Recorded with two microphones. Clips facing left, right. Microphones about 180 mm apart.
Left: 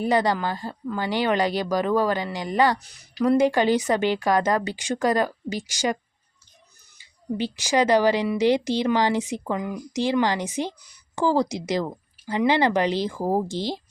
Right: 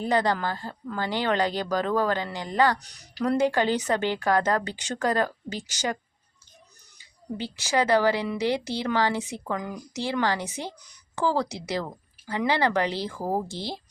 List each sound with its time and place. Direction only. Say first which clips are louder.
0.0 s speech: left 3 dB; 15° left (ahead or behind)
7.3 s speech: left 3 dB; 15° left (ahead or behind)